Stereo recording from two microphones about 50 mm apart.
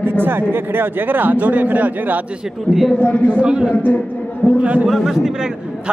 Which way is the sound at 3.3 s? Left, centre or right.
Right.